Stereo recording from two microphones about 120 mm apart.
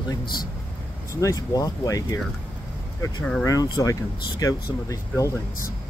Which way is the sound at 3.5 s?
30° left (ahead or behind).